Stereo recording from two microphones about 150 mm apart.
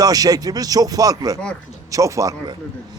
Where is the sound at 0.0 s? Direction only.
25° right (ahead or behind).